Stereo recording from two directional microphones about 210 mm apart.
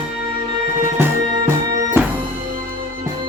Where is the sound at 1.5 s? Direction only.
10° right (ahead or behind).